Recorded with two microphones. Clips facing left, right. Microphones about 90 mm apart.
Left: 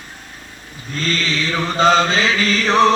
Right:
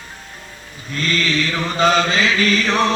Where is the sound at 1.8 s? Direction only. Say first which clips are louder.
Left 2 dB; 30° left (ahead or behind).